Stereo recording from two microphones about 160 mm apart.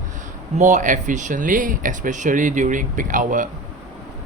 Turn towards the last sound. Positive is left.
turn(degrees=-55)  # may be behind; listen again after turning